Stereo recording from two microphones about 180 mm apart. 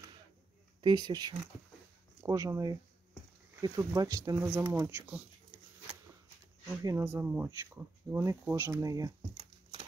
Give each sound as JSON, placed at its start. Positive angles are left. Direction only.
{"t": 0.7, "sound": "speech", "side_deg": -25}
{"t": 6.8, "sound": "speech", "side_deg": -15}